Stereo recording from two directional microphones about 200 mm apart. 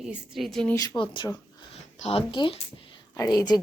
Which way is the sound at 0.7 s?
20° left (ahead or behind).